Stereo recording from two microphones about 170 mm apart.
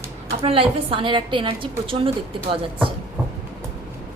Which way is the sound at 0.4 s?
35° right (ahead or behind).